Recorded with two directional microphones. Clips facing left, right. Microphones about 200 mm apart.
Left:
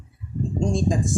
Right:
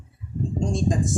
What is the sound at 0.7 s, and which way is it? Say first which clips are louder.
Speech: even; centre (ahead or behind).